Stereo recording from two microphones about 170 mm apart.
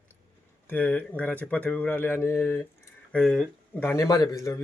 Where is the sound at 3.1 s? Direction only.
Centre (ahead or behind).